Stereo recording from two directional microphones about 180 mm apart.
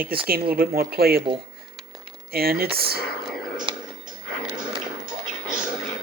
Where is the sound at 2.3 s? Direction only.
55° right (ahead or behind).